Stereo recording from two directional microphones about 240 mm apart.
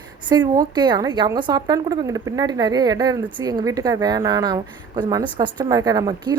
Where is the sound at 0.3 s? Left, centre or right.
Centre.